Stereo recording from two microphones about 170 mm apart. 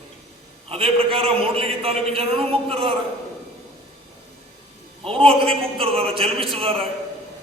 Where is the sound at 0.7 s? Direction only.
35° right (ahead or behind).